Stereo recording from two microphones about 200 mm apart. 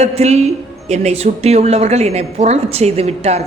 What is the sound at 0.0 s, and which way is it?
Speech, 35° right (ahead or behind).